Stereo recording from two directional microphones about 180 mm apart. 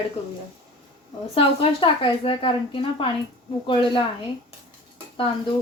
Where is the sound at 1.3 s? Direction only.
30° left (ahead or behind).